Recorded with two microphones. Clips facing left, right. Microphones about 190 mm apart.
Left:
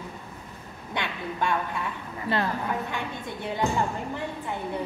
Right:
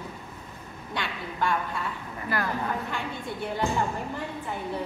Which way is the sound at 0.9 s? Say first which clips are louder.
Left 2 dB; 20° left (ahead or behind).